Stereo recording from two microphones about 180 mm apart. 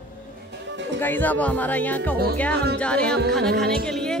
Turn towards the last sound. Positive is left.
turn(degrees=5)  # may be behind; listen again after turning